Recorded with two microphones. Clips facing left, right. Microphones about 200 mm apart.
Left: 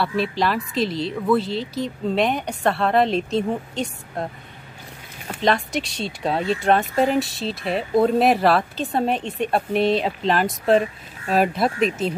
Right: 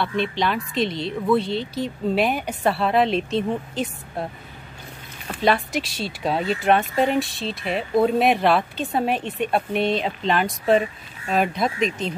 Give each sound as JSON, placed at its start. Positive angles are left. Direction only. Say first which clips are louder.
{"t": 0.0, "sound": "speech", "louder": "left 1 dB", "side_deg": 5}
{"t": 5.4, "sound": "speech", "louder": "even", "side_deg": -5}